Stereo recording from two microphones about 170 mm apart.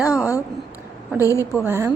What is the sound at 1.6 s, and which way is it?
Speech, 15° right (ahead or behind).